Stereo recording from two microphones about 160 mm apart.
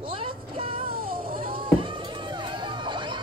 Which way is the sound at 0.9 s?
65° right (ahead or behind).